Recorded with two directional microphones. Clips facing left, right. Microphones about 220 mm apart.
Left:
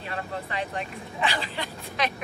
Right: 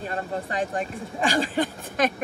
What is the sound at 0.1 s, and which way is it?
Speech, 45° right (ahead or behind).